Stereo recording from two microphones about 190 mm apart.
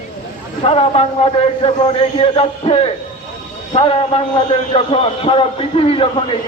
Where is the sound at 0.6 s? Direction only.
30° left (ahead or behind).